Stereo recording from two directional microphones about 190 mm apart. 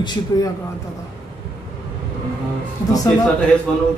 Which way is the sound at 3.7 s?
5° left (ahead or behind).